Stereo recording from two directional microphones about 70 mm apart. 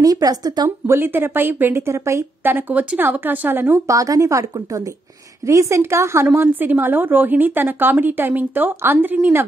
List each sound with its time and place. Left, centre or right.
0.0 s a woman's voice: right
0.7 s speech: right
2.4 s a woman's voice: right
3.8 s a woman's voice: right